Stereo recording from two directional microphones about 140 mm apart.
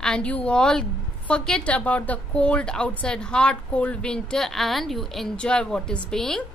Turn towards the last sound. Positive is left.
turn(degrees=5)  # may be behind; listen again after turning